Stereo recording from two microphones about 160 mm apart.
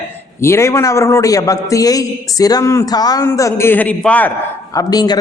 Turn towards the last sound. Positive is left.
turn(degrees=25)  # may be behind; listen again after turning